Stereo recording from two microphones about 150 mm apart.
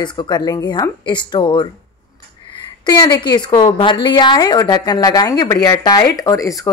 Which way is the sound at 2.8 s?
25° left (ahead or behind).